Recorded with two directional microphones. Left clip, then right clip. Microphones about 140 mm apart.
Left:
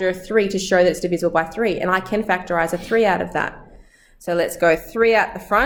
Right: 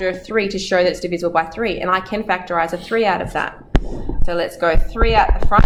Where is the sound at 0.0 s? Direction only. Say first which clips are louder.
Left 1 dB; 15° left (ahead or behind).